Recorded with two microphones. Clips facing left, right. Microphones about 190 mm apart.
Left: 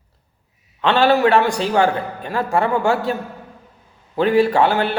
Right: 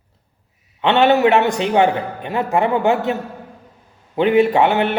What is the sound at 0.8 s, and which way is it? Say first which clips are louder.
Speech: right 1 dB; 20° right (ahead or behind).